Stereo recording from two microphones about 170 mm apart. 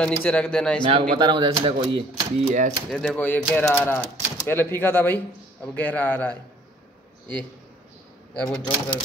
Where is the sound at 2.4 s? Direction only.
45° right (ahead or behind).